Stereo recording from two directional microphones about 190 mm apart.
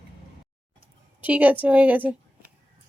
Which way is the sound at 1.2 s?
10° right (ahead or behind).